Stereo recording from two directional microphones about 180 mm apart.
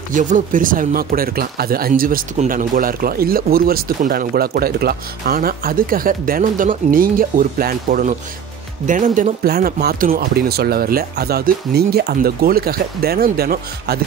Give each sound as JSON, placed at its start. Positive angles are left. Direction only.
{"t": 0.1, "sound": "speech", "side_deg": -45}